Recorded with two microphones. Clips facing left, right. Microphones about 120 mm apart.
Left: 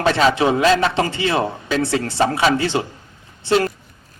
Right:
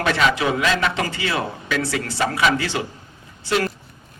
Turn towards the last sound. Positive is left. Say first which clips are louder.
# left 4 dB
turn(degrees=30)  # may be behind; listen again after turning